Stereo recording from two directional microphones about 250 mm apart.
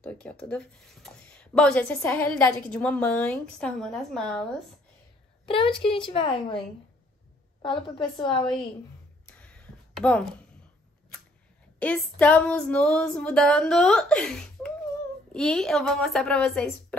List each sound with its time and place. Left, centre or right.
0.0 s speech: centre
5.5 s a woman's voice: left
7.6 s a woman's voice: centre
9.4 s a sound: centre
11.8 s speech: centre